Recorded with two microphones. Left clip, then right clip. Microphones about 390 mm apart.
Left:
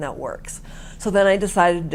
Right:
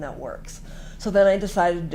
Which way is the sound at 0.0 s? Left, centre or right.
Left.